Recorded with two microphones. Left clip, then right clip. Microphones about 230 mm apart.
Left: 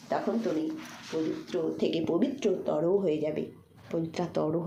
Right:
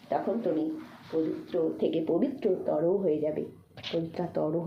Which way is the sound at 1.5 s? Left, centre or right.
Left.